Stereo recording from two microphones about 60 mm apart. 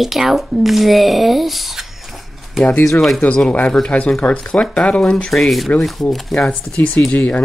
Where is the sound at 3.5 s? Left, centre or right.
Left.